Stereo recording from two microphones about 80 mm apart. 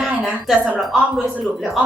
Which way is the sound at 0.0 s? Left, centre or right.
Centre.